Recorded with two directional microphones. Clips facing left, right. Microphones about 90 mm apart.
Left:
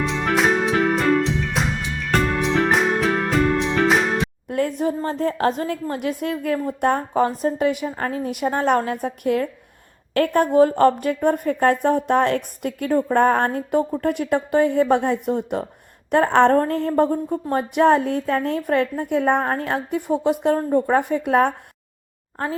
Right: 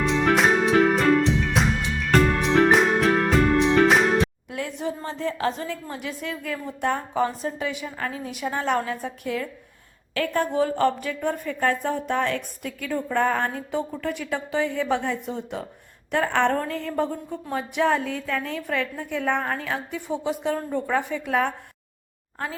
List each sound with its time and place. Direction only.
0.0 s music: centre (ahead or behind)
4.4 s a woman's voice: 50° left (ahead or behind)
20.6 s a woman's voice: 40° left (ahead or behind); by 21.5 s 55° left (ahead or behind)